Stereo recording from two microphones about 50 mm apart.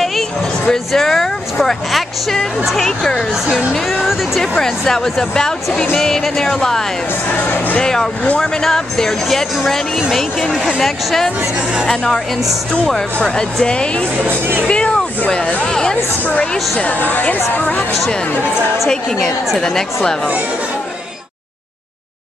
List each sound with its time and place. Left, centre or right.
0.7 s speech: centre
4.4 s speech: centre
7.8 s speech: centre
11.9 s speech: centre
14.2 s speech: right
14.7 s a sound: centre
15.2 s speech: left
16.3 s speech: left
19.1 s a woman's voice: centre
19.6 s speech: centre